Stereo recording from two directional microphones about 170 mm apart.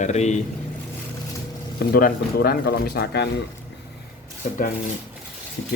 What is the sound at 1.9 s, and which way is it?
Speech, 65° left (ahead or behind).